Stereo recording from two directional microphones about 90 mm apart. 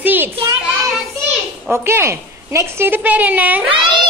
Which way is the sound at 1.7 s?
30° right (ahead or behind).